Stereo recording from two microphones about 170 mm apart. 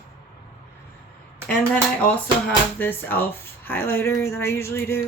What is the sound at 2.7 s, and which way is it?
Speech, 10° left (ahead or behind).